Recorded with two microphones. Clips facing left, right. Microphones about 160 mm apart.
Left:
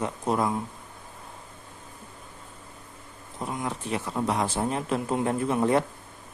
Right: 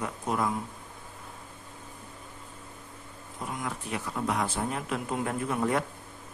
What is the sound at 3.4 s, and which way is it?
A man's voice, 25° left (ahead or behind).